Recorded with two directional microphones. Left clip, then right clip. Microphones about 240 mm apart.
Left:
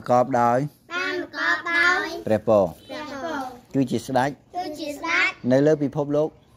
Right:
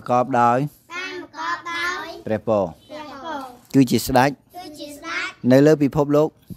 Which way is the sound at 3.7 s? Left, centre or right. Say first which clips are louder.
Right 7 dB; right.